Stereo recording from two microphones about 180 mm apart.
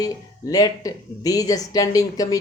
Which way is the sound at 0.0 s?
20° left (ahead or behind).